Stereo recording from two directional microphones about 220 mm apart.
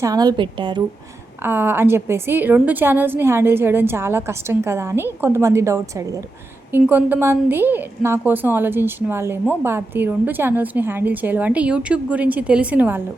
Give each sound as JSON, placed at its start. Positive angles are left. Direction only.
{"t": 0.0, "sound": "a woman's voice", "side_deg": -15}
{"t": 1.5, "sound": "a woman's voice", "side_deg": -10}